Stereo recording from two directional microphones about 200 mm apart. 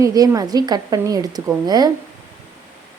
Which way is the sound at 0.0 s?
20° right (ahead or behind).